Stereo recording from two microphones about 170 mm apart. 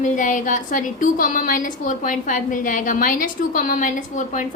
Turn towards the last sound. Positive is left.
turn(degrees=50)  # may be behind; listen again after turning